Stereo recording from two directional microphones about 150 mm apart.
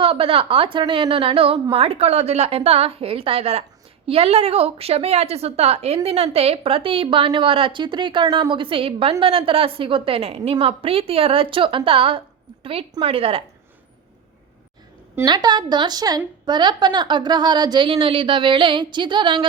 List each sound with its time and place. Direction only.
0.0 s a woman's voice: 40° right (ahead or behind)
15.1 s a woman's voice: 25° right (ahead or behind)